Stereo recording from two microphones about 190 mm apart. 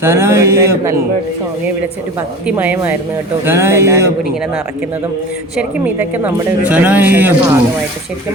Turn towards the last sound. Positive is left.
turn(degrees=-10)  # may be behind; listen again after turning